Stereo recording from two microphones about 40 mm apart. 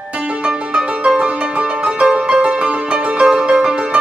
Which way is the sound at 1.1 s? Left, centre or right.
Right.